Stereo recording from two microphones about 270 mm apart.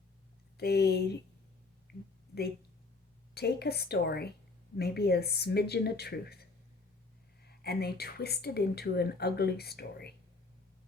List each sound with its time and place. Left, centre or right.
0.5 s a woman's voice: left
1.9 s a sound: left
3.3 s a woman's voice: left